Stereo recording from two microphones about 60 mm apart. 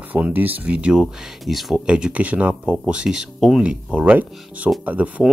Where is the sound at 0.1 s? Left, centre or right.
Right.